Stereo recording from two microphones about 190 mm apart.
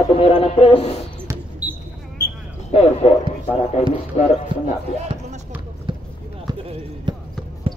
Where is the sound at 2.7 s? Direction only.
30° left (ahead or behind).